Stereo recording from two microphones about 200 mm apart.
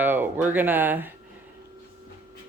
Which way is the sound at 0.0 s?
10° right (ahead or behind).